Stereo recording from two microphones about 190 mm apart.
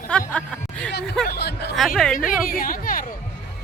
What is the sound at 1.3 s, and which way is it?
Speech, 60° left (ahead or behind).